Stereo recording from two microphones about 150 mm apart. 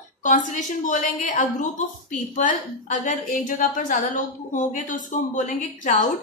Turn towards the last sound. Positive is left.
turn(degrees=60)  # may be behind; listen again after turning